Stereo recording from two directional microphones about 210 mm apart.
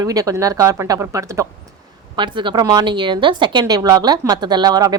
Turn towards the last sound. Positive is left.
turn(degrees=-20)  # may be behind; listen again after turning